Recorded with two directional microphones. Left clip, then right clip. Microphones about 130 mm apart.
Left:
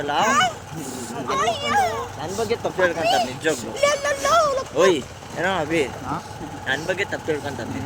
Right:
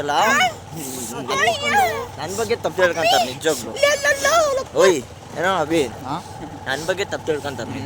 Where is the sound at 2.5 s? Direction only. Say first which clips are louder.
Right 3 dB; 90° right.